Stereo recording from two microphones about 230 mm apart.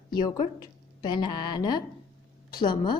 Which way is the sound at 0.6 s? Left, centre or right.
Centre.